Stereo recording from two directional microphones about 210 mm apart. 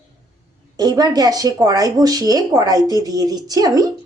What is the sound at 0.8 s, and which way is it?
Speech, 20° right (ahead or behind).